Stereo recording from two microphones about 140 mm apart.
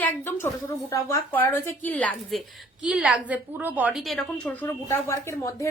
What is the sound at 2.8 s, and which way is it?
A woman's voice, 5° right (ahead or behind).